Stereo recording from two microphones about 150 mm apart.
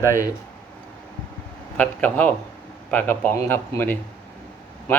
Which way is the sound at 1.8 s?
10° left (ahead or behind).